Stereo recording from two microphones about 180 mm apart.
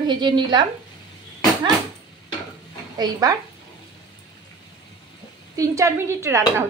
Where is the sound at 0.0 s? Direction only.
25° right (ahead or behind).